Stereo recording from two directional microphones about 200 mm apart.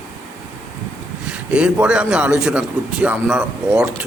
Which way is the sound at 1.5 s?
5° right (ahead or behind).